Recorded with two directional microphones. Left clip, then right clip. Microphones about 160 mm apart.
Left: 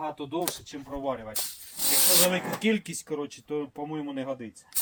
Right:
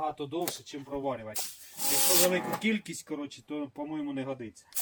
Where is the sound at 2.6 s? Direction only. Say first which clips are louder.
Left 4 dB; 30° left (ahead or behind).